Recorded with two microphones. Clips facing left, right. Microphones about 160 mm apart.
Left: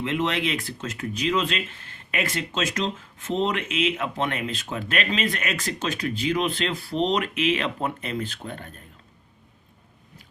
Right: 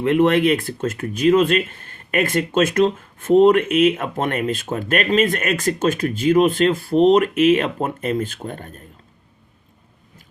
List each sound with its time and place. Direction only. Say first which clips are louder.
0.0 s speech: right 10 dB; 55° right (ahead or behind)